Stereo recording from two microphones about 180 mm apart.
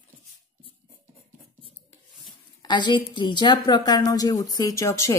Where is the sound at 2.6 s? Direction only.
25° left (ahead or behind).